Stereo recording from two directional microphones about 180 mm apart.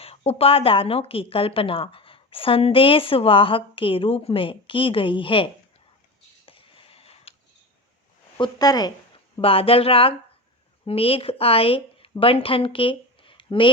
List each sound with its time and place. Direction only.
0.0 s a woman's voice: 35° left (ahead or behind)
6.4 s a sound: 30° left (ahead or behind)
8.4 s speech: 20° left (ahead or behind)